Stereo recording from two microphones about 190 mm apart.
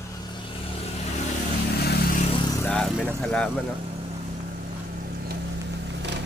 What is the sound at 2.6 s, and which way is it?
Speech, 5° left (ahead or behind).